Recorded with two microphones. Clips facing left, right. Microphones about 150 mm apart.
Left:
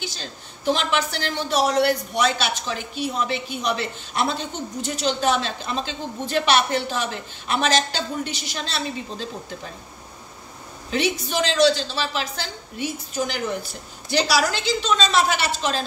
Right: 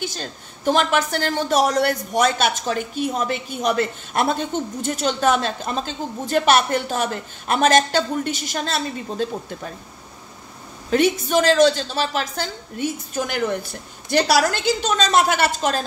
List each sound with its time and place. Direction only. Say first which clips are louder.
0.0 s a woman's voice: right 5 dB; 50° right (ahead or behind)
10.9 s a woman's voice: right 6 dB; 50° right (ahead or behind)